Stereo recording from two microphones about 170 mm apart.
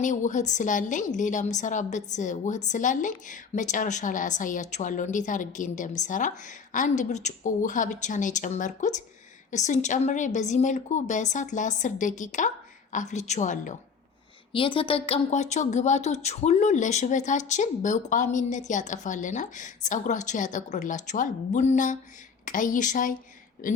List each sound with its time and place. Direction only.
0.0 s a woman's voice: 45° left (ahead or behind)
14.5 s a woman's voice: 30° left (ahead or behind); by 23.8 s 50° left (ahead or behind)